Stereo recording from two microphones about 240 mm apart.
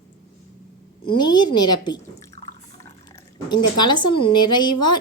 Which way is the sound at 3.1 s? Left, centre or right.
Centre.